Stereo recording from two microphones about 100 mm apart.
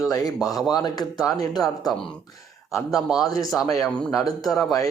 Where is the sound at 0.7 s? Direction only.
40° left (ahead or behind).